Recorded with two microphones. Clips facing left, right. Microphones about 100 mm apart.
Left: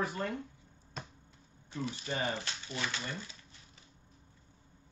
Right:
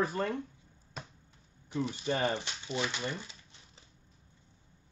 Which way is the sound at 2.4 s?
20° right (ahead or behind).